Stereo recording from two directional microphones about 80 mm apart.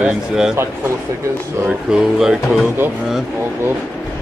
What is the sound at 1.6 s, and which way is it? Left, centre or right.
Speech, centre.